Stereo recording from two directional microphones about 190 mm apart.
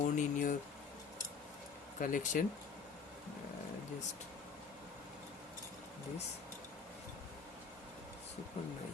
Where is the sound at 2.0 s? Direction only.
45° left (ahead or behind).